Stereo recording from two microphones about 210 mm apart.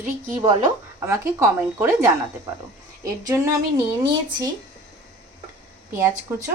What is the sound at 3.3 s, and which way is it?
A woman's voice, 15° right (ahead or behind).